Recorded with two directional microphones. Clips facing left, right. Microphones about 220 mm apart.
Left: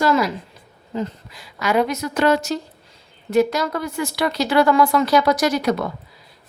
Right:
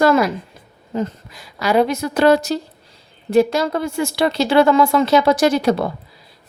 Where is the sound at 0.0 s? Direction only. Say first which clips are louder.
Right 4 dB; 55° right (ahead or behind).